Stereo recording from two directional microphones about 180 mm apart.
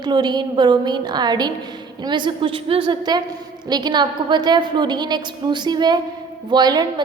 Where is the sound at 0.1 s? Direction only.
25° right (ahead or behind).